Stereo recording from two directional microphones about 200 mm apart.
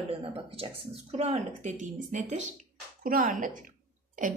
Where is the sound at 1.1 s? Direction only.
35° right (ahead or behind).